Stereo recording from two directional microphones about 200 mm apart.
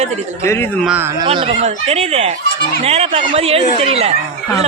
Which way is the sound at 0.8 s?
10° right (ahead or behind).